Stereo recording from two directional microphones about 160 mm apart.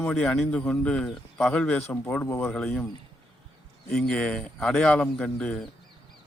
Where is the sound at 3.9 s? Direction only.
5° left (ahead or behind).